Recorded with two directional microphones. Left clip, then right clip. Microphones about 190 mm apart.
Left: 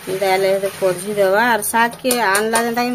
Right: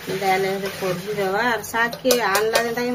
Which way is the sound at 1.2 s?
55° left (ahead or behind).